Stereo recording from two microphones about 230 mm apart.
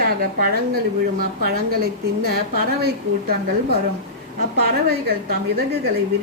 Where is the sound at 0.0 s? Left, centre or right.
Right.